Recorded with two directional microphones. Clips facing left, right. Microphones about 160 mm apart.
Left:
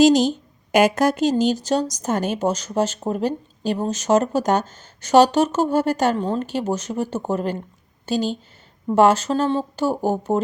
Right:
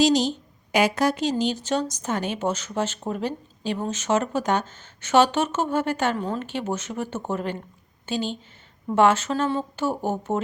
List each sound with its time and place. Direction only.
0.0 s speech: 50° left (ahead or behind)